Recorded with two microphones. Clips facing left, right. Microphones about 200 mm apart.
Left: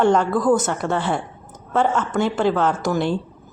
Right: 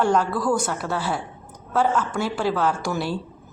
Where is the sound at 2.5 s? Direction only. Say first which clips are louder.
Left 3 dB; 20° left (ahead or behind).